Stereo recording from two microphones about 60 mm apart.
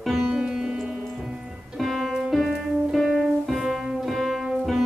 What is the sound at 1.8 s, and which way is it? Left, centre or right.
Music, centre.